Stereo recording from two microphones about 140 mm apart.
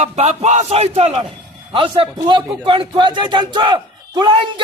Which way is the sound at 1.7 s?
40° right (ahead or behind).